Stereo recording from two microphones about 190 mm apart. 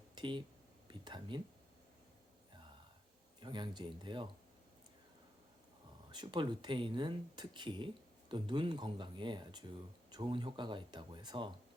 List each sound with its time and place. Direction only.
0.2 s speech: 25° right (ahead or behind)
3.4 s speech: 25° right (ahead or behind)
6.1 s speech: 25° right (ahead or behind)